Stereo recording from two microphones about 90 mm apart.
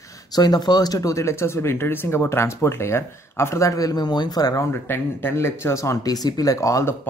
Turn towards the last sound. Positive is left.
turn(degrees=35)  # may be behind; listen again after turning